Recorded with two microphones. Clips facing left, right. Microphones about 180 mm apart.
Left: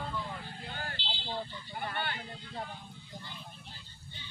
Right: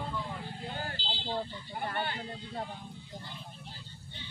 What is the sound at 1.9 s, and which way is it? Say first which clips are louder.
Speech: right 2 dB; 40° right (ahead or behind).